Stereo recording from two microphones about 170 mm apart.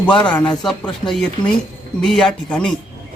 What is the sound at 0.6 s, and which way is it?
A man's voice, centre (ahead or behind).